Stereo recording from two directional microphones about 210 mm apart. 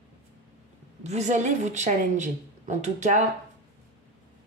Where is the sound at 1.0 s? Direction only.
30° right (ahead or behind).